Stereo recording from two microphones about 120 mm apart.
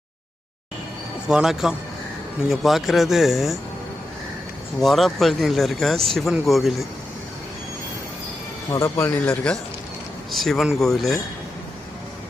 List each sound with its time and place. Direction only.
1.3 s speech: 5° right (ahead or behind)
4.8 s speech: centre (ahead or behind)
8.8 s speech: 20° left (ahead or behind)
10.3 s speech: centre (ahead or behind)